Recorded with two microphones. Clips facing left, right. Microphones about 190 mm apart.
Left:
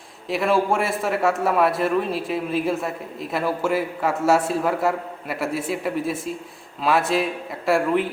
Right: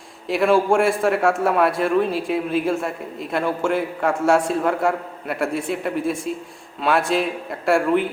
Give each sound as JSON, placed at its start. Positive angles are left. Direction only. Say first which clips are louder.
{"t": 0.3, "sound": "a man's voice", "louder": "right 3 dB", "side_deg": 0}